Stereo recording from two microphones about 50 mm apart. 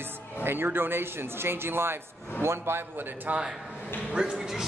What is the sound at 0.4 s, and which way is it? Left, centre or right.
Speech, right.